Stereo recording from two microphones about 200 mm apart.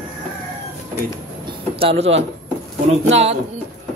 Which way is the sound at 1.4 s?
25° right (ahead or behind).